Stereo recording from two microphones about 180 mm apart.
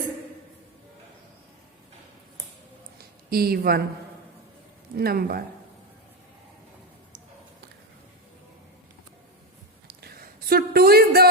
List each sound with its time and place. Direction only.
3.2 s speech: 60° right (ahead or behind)
4.9 s speech: 60° right (ahead or behind)
10.0 s a sound: 55° right (ahead or behind)